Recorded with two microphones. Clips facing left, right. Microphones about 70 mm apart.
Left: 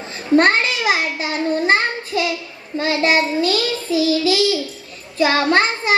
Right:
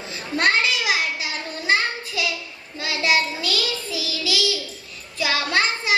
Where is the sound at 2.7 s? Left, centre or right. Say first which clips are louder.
Left 5 dB; left.